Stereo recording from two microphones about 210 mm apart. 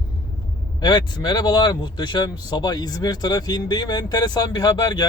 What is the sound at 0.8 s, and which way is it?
Speech, 20° left (ahead or behind).